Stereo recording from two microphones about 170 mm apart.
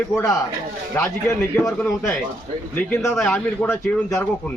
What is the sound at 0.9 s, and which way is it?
Speech, 15° left (ahead or behind).